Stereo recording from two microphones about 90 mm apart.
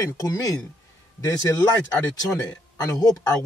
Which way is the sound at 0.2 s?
45° left (ahead or behind).